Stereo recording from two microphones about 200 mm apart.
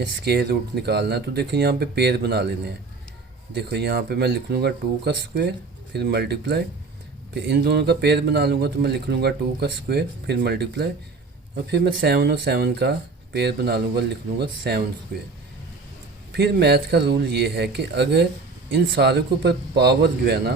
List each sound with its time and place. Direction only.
0.2 s speech: 55° right (ahead or behind)
16.3 s speech: 55° right (ahead or behind)